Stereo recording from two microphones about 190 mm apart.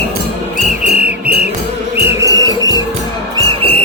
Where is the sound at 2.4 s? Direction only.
20° right (ahead or behind).